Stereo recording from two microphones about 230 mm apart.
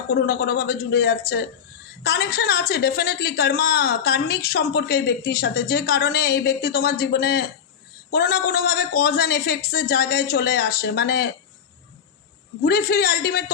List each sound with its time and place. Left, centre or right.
0.1 s speech: left
12.6 s speech: left